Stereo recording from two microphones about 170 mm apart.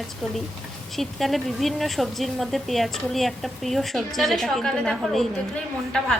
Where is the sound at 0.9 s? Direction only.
Centre (ahead or behind).